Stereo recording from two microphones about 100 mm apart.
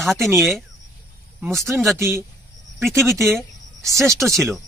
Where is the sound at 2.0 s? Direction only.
25° right (ahead or behind).